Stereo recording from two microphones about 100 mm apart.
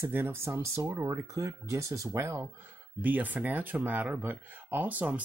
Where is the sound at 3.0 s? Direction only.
15° right (ahead or behind).